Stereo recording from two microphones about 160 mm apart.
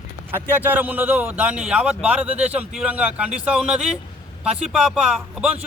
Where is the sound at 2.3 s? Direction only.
45° right (ahead or behind).